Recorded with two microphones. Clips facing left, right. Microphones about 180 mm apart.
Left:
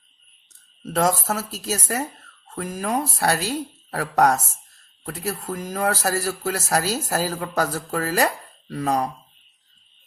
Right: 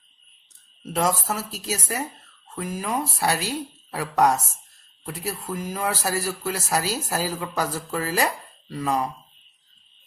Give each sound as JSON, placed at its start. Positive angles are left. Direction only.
{"t": 0.9, "sound": "speech", "side_deg": 50}
{"t": 5.0, "sound": "speech", "side_deg": 50}